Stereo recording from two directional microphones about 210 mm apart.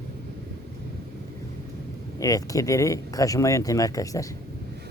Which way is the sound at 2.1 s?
15° left (ahead or behind).